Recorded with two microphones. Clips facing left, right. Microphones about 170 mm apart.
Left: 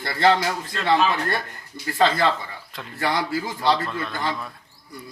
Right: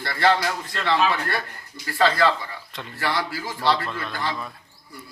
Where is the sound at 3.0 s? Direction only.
20° left (ahead or behind).